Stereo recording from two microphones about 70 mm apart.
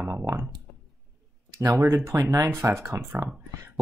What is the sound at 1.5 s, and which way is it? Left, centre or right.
Speech, right.